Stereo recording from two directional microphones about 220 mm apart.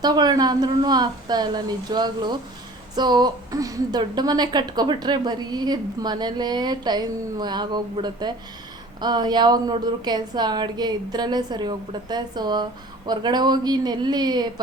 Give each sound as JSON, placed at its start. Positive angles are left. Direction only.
{"t": 0.0, "sound": "speech", "side_deg": -20}